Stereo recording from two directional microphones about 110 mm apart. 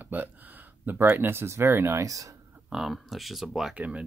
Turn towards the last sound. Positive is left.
turn(degrees=-10)  # may be behind; listen again after turning